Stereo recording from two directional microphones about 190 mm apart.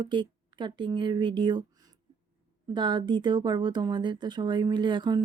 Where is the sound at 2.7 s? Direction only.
25° right (ahead or behind).